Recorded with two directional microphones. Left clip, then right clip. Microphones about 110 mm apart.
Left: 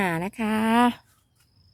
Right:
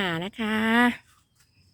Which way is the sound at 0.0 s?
40° left (ahead or behind).